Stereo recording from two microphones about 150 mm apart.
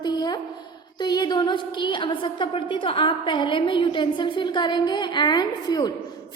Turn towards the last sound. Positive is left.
turn(degrees=30)  # may be behind; listen again after turning